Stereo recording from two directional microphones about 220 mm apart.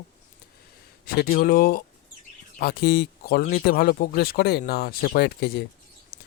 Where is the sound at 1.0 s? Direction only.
45° left (ahead or behind).